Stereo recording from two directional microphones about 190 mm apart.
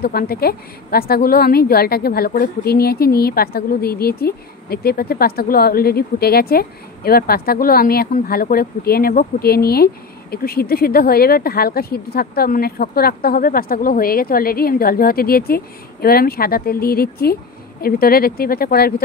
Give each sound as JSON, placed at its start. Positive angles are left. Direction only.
{"t": 0.0, "sound": "a woman's voice", "side_deg": 55}